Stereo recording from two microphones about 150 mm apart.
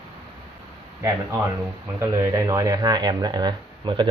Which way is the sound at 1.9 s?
20° right (ahead or behind).